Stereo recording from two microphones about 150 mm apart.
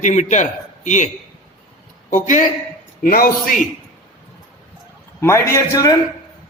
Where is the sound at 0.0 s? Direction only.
55° left (ahead or behind).